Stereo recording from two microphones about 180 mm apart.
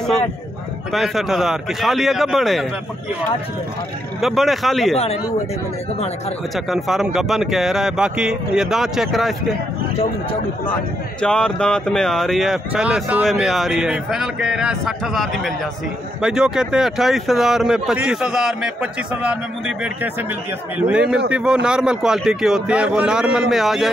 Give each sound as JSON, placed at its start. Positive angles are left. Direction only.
{"t": 0.9, "sound": "speech", "side_deg": 0}
{"t": 4.2, "sound": "speech", "side_deg": 0}
{"t": 4.9, "sound": "speech", "side_deg": 35}
{"t": 6.5, "sound": "speech", "side_deg": 0}
{"t": 11.1, "sound": "speech", "side_deg": 5}